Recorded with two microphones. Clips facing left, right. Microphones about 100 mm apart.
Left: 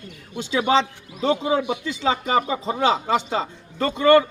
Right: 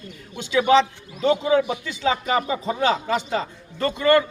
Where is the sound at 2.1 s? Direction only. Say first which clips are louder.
Left 1 dB; 30° left (ahead or behind).